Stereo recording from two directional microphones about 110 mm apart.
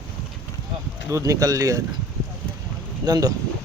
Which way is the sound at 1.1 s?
30° right (ahead or behind).